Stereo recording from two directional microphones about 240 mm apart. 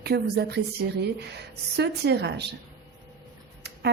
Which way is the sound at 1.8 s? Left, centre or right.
Right.